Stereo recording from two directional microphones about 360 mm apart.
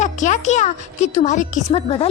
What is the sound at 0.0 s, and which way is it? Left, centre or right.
A woman's voice, centre.